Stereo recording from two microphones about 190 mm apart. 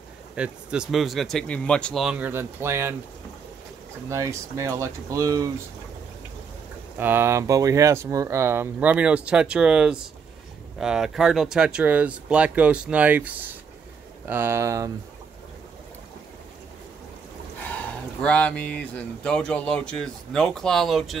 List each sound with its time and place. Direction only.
0.4 s speech: 5° right (ahead or behind)
4.1 s speech: 15° right (ahead or behind)
7.0 s speech: 10° right (ahead or behind)
18.2 s speech: 5° left (ahead or behind)